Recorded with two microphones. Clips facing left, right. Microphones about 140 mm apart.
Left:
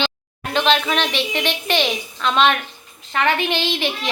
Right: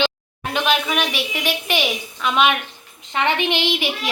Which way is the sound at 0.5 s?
10° right (ahead or behind).